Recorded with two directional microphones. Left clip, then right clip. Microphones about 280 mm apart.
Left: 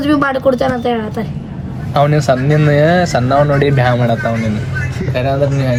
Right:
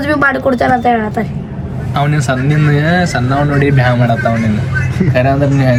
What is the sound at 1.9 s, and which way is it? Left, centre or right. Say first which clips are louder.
Speech: left 3 dB; left.